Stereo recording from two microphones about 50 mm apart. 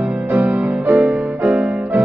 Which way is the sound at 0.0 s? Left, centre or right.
Right.